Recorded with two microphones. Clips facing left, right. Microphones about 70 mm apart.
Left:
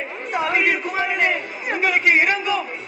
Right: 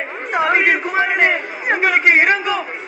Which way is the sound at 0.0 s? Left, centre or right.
Right.